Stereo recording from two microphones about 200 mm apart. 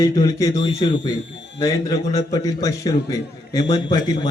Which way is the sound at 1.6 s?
15° left (ahead or behind).